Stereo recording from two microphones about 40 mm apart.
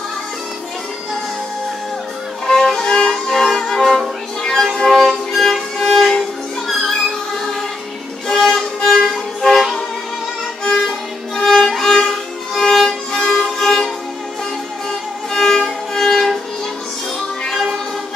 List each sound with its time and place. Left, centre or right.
2.4 s violin: centre
4.4 s music: centre
4.9 s violin: centre
8.3 s violin: centre
13.2 s music: centre
13.6 s music: centre
14.9 s music: centre
17.5 s music: centre